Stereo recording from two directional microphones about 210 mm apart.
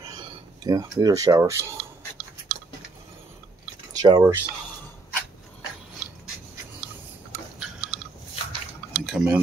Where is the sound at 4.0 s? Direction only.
15° right (ahead or behind).